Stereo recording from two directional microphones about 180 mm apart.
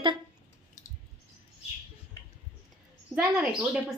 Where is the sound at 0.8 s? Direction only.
45° left (ahead or behind).